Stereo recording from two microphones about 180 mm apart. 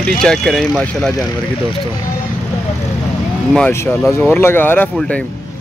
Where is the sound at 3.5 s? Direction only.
10° left (ahead or behind).